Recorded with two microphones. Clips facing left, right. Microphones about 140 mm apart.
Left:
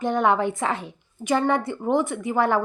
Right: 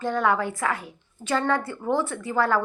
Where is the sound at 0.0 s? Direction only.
20° left (ahead or behind).